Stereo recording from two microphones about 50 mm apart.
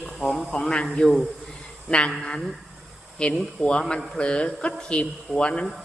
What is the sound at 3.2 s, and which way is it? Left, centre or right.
A man's voice, centre.